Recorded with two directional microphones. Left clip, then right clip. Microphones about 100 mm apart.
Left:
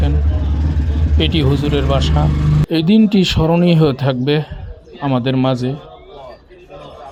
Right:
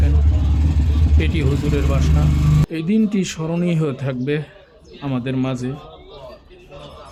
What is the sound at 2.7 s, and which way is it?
Speech, 40° left (ahead or behind).